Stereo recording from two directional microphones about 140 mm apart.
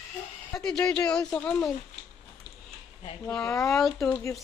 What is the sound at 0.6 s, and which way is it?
Speech, 5° left (ahead or behind).